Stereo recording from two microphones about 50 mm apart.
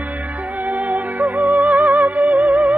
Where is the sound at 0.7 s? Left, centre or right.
Right.